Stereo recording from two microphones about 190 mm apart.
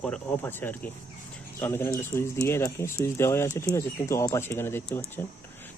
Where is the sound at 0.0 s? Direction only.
10° left (ahead or behind).